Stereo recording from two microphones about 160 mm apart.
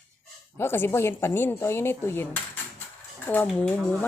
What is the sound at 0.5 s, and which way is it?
Speech, 15° left (ahead or behind).